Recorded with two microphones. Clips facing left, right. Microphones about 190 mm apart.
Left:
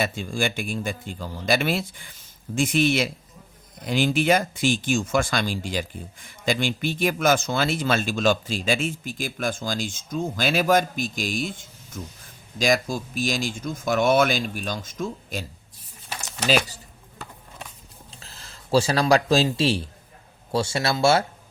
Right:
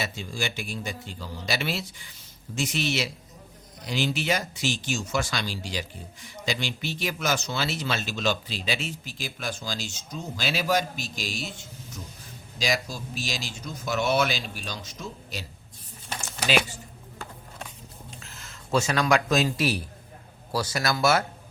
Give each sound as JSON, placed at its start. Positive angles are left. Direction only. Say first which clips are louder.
{"t": 0.0, "sound": "speech", "louder": "left 6 dB", "side_deg": 50}
{"t": 18.1, "sound": "speech", "louder": "right 1 dB", "side_deg": 35}